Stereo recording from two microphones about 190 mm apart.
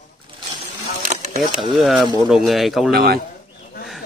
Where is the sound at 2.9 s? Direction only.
55° right (ahead or behind).